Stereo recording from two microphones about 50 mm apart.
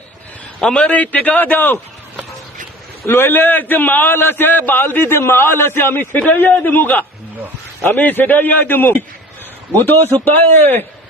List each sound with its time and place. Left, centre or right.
0.6 s a man's voice: centre
0.9 s a man's voice: left
3.1 s a man's voice: left
5.1 s a man's voice: left